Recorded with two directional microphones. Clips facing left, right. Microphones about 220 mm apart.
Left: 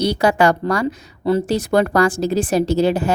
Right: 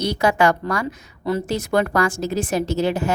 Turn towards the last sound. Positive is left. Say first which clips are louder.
# left 4 dB
turn(degrees=35)  # may be behind; listen again after turning